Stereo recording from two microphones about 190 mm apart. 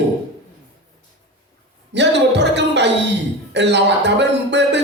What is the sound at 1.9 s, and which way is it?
Speech, 65° right (ahead or behind).